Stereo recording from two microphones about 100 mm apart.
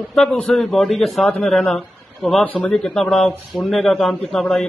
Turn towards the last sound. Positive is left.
turn(degrees=5)  # may be behind; listen again after turning